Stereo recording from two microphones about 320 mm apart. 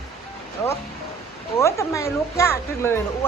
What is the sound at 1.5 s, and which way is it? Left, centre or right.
A woman's voice, centre.